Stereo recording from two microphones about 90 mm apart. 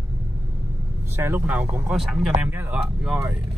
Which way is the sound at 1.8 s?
5° right (ahead or behind).